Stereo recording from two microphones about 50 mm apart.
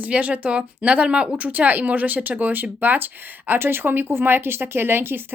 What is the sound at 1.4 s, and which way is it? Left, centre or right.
Speech, right.